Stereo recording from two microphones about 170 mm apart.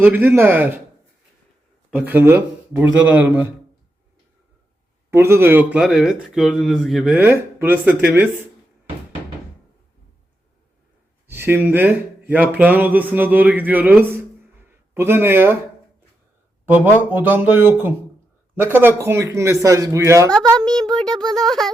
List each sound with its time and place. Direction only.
0.0 s speech: 10° right (ahead or behind)
2.0 s speech: 10° right (ahead or behind)
5.1 s speech: 15° right (ahead or behind)
11.3 s a man's voice: 15° right (ahead or behind)
17.1 s speech: 10° right (ahead or behind)
20.3 s speech: 5° left (ahead or behind)